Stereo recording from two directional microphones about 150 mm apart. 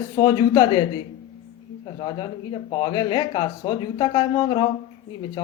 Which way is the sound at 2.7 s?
30° left (ahead or behind).